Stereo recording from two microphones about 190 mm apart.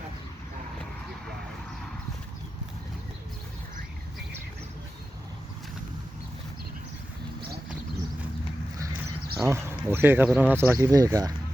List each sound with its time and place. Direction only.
9.3 s speech: 15° right (ahead or behind)